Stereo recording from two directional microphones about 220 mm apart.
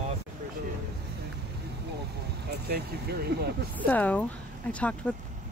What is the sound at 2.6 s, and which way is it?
Speech, 45° right (ahead or behind).